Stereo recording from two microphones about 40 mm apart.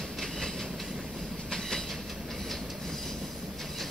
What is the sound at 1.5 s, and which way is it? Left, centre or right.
Train, centre.